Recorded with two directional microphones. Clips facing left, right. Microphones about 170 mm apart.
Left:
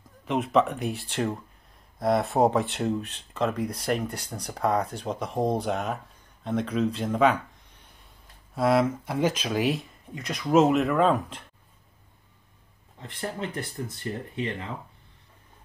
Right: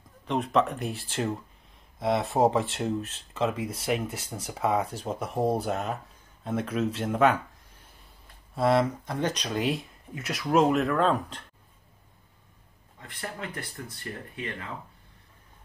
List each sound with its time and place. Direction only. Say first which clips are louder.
0.3 s speech: left 2 dB; centre (ahead or behind)
13.0 s speech: left 5 dB; 20° left (ahead or behind)